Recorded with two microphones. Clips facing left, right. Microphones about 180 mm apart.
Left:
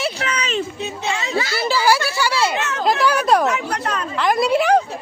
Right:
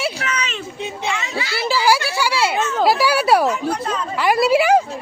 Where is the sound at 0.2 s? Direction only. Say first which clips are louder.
Left 1 dB; 35° left (ahead or behind).